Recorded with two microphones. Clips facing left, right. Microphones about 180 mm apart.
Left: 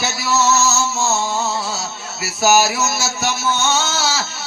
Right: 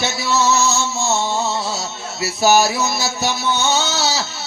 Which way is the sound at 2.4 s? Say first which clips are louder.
Even; 5° left (ahead or behind).